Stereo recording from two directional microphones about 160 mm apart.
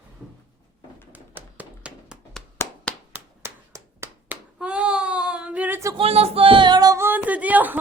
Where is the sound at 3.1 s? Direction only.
15° right (ahead or behind).